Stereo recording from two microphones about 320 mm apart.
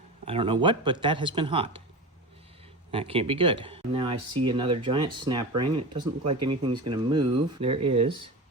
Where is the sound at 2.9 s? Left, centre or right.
Centre.